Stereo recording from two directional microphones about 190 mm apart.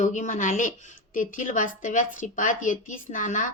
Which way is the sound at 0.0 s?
40° left (ahead or behind).